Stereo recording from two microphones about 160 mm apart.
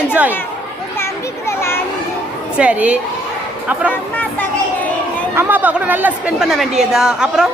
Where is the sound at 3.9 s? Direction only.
10° left (ahead or behind).